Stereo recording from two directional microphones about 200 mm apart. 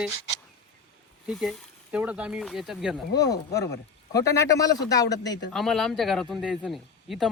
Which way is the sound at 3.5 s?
15° left (ahead or behind).